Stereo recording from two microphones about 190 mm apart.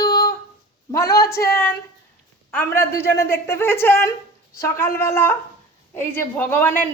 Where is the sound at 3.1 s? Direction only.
15° left (ahead or behind).